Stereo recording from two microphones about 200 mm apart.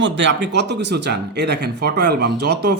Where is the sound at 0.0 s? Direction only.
65° right (ahead or behind).